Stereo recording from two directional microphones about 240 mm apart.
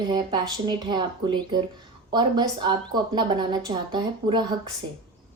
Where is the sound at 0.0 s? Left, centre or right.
Centre.